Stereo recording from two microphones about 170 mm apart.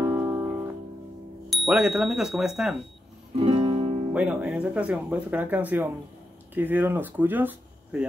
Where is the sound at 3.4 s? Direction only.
30° right (ahead or behind).